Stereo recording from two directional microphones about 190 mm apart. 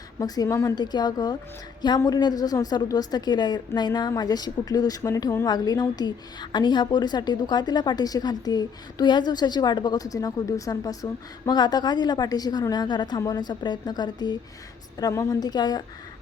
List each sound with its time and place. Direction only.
0.2 s a woman's voice: 20° left (ahead or behind)